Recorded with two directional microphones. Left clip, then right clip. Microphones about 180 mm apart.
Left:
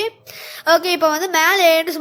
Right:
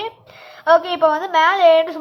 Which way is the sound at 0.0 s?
55° left (ahead or behind).